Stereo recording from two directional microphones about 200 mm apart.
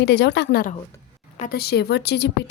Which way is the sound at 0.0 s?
55° left (ahead or behind).